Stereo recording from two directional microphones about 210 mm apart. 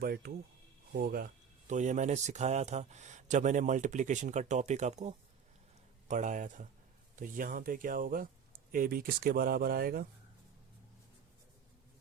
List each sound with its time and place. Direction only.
0.0 s speech: 45° right (ahead or behind)